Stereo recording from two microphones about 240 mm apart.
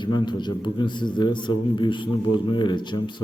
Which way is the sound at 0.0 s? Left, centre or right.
Centre.